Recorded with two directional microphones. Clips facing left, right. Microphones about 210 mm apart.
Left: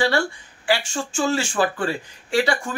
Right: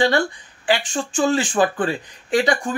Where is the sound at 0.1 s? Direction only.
20° right (ahead or behind).